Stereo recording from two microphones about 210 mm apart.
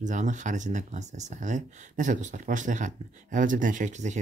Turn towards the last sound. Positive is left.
turn(degrees=-35)  # may be behind; listen again after turning